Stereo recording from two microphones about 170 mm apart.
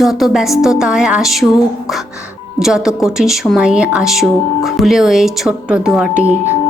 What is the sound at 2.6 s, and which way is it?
Speech, 5° right (ahead or behind).